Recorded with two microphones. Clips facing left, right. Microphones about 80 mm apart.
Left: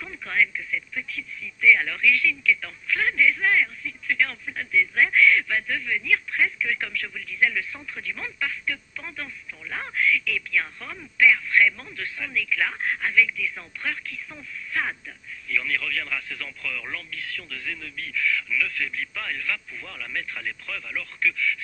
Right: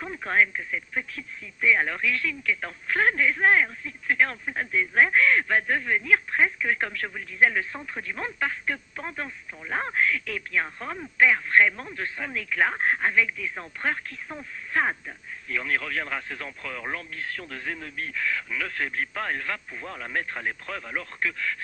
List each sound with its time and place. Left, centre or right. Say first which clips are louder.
0.0 s speech: right 2 dB; right